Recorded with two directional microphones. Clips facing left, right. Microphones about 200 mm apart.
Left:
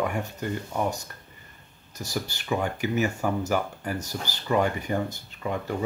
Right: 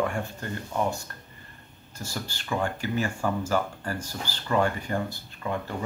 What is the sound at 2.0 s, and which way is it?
Speech, 15° left (ahead or behind).